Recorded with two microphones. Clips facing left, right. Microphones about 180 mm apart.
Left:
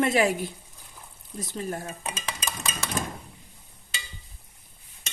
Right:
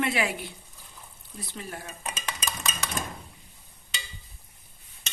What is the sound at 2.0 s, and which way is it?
Dishes, 30° left (ahead or behind).